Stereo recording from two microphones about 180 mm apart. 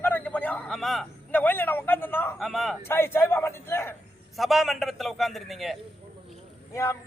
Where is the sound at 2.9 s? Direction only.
15° left (ahead or behind).